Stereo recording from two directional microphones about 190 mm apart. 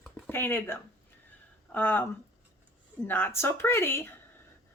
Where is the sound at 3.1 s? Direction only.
10° left (ahead or behind).